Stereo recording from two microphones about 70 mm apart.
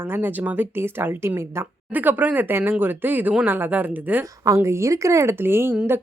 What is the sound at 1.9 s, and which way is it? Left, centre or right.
Speech, right.